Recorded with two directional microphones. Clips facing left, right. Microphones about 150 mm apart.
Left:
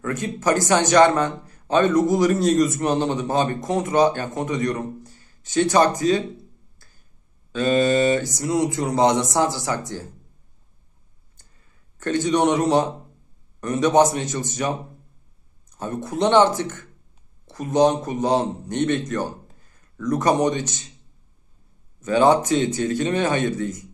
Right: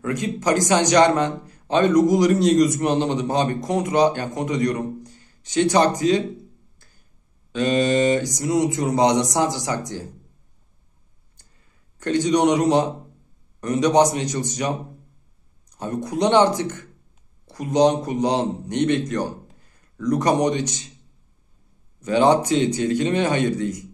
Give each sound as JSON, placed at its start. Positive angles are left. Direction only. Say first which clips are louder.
{"t": 0.0, "sound": "a man's voice", "louder": "even", "side_deg": -15}
{"t": 7.5, "sound": "a man's voice", "louder": "left 1 dB", "side_deg": -15}
{"t": 12.0, "sound": "a man's voice", "louder": "right 1 dB", "side_deg": -15}
{"t": 15.8, "sound": "a man's voice", "louder": "right 1 dB", "side_deg": -15}
{"t": 22.0, "sound": "a man's voice", "louder": "even", "side_deg": -15}